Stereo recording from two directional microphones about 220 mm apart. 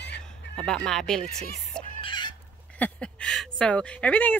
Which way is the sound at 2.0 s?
20° left (ahead or behind).